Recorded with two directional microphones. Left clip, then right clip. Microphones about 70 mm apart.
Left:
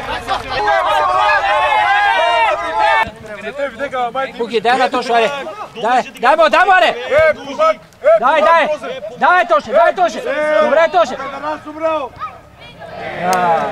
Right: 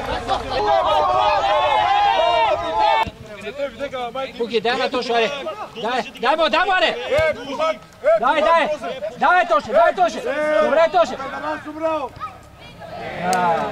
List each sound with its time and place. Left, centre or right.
0.0 s a sound: left
5.8 s speech: left
13.0 s speech: left